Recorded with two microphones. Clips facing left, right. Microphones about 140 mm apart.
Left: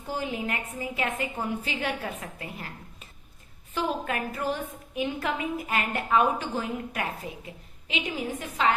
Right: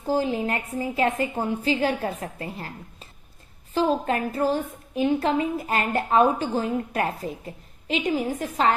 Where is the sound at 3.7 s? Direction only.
30° right (ahead or behind).